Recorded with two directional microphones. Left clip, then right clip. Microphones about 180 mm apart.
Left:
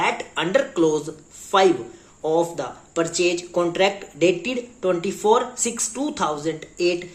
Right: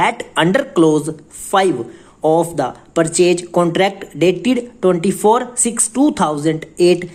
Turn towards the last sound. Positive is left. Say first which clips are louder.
# right 9 dB
turn(degrees=-45)  # may be behind; listen again after turning